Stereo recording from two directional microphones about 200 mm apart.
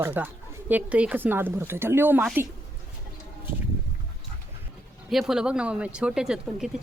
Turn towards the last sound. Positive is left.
turn(degrees=0)  # may be behind; listen again after turning